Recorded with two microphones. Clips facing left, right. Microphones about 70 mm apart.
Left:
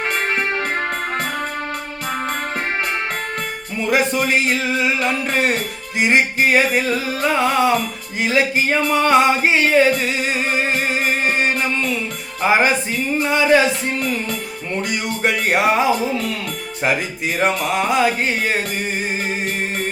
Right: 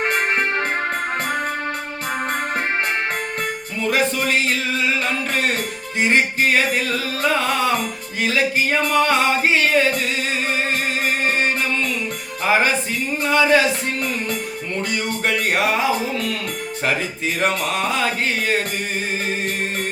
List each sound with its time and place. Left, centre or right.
3.8 s music: centre
6.0 s music: centre
8.2 s a sound: left
12.4 s music: centre
15.2 s music: left
16.8 s music: centre